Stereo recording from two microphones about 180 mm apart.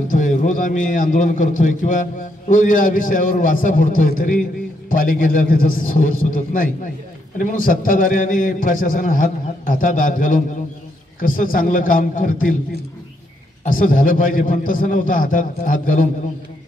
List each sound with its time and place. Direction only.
0.1 s a man's voice: 45° left (ahead or behind)
13.7 s a man's voice: 50° left (ahead or behind)